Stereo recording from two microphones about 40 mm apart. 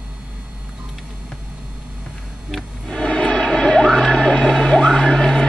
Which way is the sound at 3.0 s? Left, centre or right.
Centre.